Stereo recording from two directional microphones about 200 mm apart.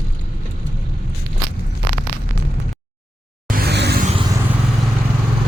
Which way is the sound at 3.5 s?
50° right (ahead or behind).